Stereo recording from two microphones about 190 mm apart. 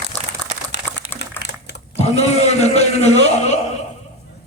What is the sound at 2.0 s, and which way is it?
A man's voice, 35° left (ahead or behind).